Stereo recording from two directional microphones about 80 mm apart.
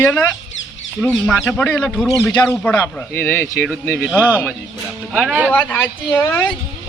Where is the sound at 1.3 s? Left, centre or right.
Left.